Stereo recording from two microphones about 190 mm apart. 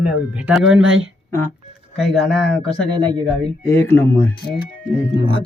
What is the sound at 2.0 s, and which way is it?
Speech, centre (ahead or behind).